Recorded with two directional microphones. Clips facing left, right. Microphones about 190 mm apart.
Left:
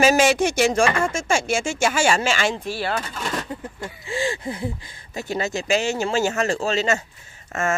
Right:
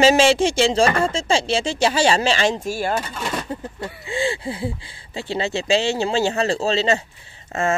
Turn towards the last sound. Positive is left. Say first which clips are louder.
# right 2 dB
turn(degrees=-35)  # may be behind; listen again after turning